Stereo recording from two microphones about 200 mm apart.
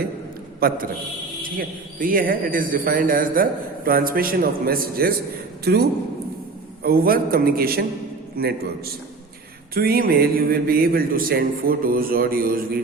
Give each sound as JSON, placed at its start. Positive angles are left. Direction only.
{"t": 0.6, "sound": "a man's voice", "side_deg": -50}
{"t": 6.8, "sound": "a man's voice", "side_deg": -50}